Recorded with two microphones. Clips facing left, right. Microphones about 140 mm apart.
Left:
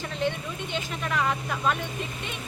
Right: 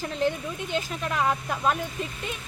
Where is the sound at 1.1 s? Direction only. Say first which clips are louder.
Right 1 dB; 20° right (ahead or behind).